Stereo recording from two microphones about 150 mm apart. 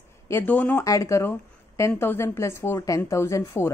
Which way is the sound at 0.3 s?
10° left (ahead or behind).